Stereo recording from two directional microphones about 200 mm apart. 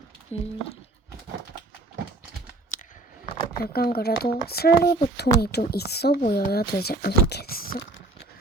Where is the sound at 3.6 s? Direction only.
50° left (ahead or behind).